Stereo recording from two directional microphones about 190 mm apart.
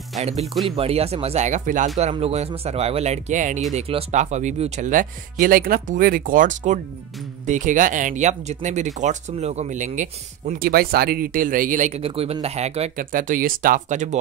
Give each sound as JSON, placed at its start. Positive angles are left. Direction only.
{"t": 0.2, "sound": "speech", "side_deg": -35}
{"t": 10.5, "sound": "speech", "side_deg": -50}